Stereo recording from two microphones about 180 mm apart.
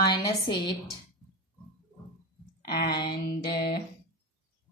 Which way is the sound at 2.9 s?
25° left (ahead or behind).